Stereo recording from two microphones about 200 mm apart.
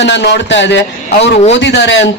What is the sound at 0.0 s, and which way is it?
Speech, 60° left (ahead or behind).